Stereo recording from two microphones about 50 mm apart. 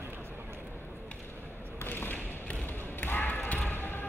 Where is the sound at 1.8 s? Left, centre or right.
Left.